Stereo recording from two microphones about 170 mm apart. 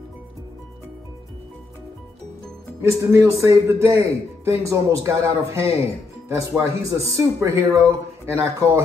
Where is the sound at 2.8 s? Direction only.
15° right (ahead or behind).